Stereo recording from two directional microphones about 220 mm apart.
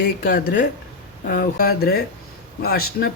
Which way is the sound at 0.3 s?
40° left (ahead or behind).